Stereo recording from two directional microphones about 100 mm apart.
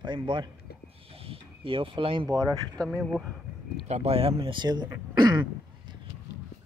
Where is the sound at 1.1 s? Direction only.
70° right (ahead or behind).